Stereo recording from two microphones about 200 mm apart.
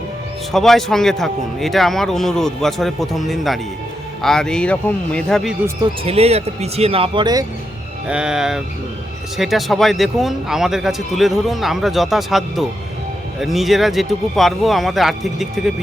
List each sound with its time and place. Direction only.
0.5 s speech: centre (ahead or behind)
6.1 s speech: 30° right (ahead or behind)
8.0 s speech: 5° right (ahead or behind)